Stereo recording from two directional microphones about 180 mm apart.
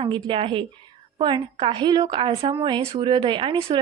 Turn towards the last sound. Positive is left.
turn(degrees=-25)  # may be behind; listen again after turning